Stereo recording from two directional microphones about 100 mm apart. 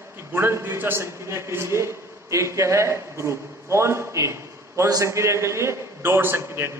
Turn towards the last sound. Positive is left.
turn(degrees=-25)  # may be behind; listen again after turning